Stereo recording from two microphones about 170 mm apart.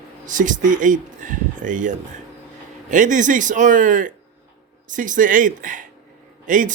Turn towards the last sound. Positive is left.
turn(degrees=-50)  # may be behind; listen again after turning